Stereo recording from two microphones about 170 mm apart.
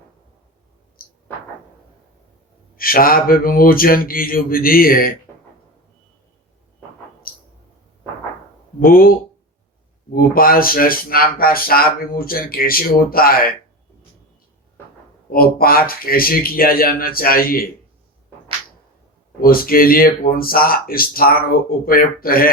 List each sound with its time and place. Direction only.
1.0 s a sound: 60° left (ahead or behind)
2.7 s speech: 60° left (ahead or behind)
7.3 s a sound: 60° left (ahead or behind)
8.8 s speech: 55° left (ahead or behind)
15.3 s speech: 60° left (ahead or behind)
19.4 s speech: 60° left (ahead or behind)